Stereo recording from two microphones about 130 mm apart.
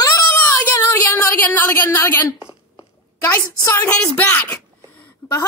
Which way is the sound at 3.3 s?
15° left (ahead or behind).